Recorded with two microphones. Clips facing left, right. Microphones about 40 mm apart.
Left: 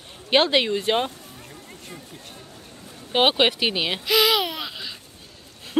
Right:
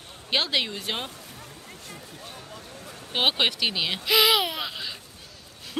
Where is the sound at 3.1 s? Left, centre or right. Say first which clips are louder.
Left 5 dB; centre.